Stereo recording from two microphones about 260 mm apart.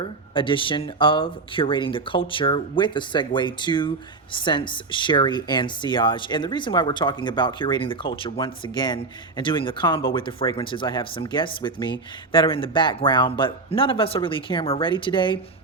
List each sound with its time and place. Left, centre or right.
0.0 s speech: centre